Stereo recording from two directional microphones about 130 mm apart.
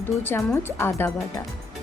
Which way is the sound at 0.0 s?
15° left (ahead or behind).